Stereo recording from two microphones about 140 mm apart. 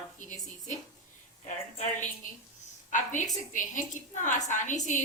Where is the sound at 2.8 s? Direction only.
65° left (ahead or behind).